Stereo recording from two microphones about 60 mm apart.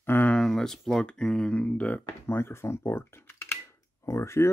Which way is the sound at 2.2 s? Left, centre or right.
Left.